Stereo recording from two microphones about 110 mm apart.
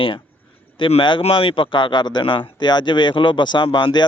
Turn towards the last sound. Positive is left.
turn(degrees=40)  # may be behind; listen again after turning